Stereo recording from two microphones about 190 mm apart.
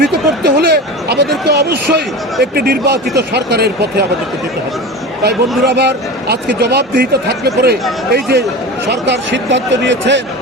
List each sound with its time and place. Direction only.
0.0 s a sound: 60° right (ahead or behind)
1.5 s speech: 55° right (ahead or behind)
5.2 s speech: 60° right (ahead or behind)